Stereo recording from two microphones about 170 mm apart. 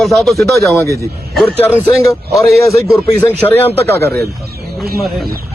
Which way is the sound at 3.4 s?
10° left (ahead or behind).